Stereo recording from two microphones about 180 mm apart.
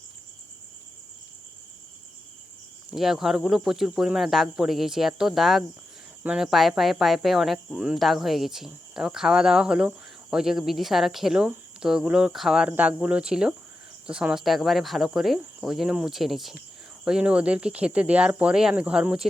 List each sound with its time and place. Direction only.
2.9 s speech: centre (ahead or behind)